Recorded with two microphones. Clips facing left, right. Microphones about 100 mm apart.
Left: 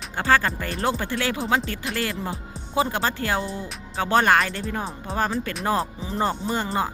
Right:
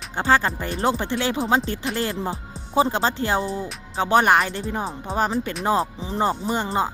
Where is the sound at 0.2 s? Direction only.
20° right (ahead or behind).